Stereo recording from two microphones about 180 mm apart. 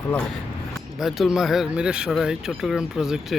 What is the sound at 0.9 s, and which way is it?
Speech, centre (ahead or behind).